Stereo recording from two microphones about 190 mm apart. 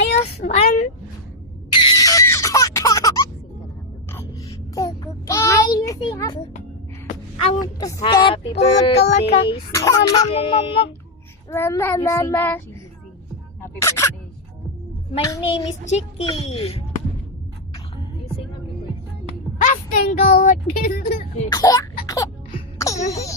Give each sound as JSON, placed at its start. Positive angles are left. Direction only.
{"t": 0.1, "sound": "a sound", "side_deg": 35}
{"t": 1.9, "sound": "music", "side_deg": 20}
{"t": 4.7, "sound": "a sound", "side_deg": 15}
{"t": 7.6, "sound": "a child's voice", "side_deg": 20}
{"t": 9.7, "sound": "speech", "side_deg": 15}
{"t": 10.3, "sound": "a child's voice", "side_deg": 30}
{"t": 11.5, "sound": "speech", "side_deg": 10}
{"t": 13.8, "sound": "a sound", "side_deg": 15}
{"t": 15.2, "sound": "speech", "side_deg": 20}
{"t": 15.8, "sound": "a child's voice", "side_deg": 35}
{"t": 19.2, "sound": "speech", "side_deg": 40}
{"t": 21.5, "sound": "speech", "side_deg": 20}
{"t": 22.0, "sound": "music", "side_deg": 20}
{"t": 23.0, "sound": "speech", "side_deg": 15}